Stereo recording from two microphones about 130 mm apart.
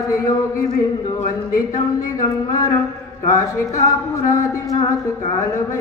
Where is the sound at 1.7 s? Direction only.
30° left (ahead or behind).